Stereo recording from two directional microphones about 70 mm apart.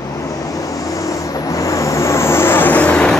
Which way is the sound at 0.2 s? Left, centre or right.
Left.